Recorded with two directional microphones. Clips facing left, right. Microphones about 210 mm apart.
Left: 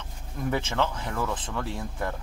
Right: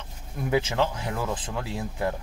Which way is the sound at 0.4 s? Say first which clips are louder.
Right 3 dB; 10° right (ahead or behind).